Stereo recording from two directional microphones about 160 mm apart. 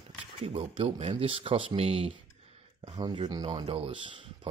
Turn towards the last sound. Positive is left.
turn(degrees=-30)  # may be behind; listen again after turning